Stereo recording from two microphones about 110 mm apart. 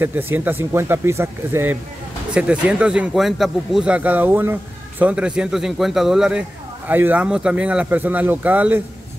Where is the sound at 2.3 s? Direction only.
10° right (ahead or behind).